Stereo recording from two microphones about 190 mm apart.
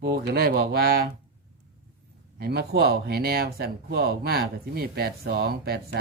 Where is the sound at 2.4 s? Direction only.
55° right (ahead or behind).